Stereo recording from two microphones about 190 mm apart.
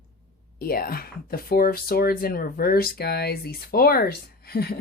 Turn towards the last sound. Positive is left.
turn(degrees=55)  # may be behind; listen again after turning